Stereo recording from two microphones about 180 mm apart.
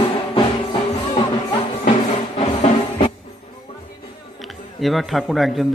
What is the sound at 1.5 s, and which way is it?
Music, 30° left (ahead or behind).